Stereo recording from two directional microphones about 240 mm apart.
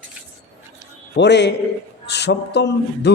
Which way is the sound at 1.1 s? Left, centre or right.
Left.